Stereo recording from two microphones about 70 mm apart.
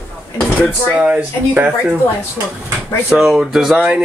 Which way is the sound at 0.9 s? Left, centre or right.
Centre.